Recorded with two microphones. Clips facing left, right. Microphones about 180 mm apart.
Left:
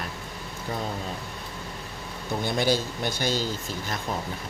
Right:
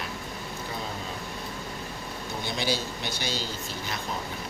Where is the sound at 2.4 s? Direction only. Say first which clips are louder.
Left 5 dB; 50° left (ahead or behind).